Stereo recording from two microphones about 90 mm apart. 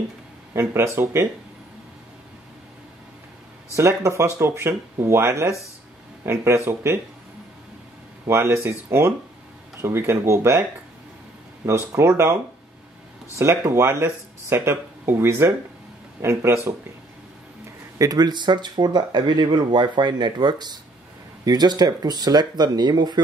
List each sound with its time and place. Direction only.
0.5 s speech: 30° right (ahead or behind)
3.7 s speech: 30° right (ahead or behind)
8.3 s speech: 30° right (ahead or behind)
11.6 s speech: 30° right (ahead or behind)
13.4 s speech: 30° right (ahead or behind)
17.9 s speech: 45° right (ahead or behind)